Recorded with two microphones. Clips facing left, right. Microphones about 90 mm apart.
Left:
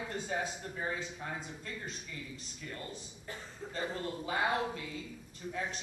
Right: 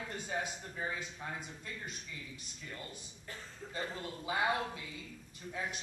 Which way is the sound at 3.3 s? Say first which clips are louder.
Left 3 dB; 20° left (ahead or behind).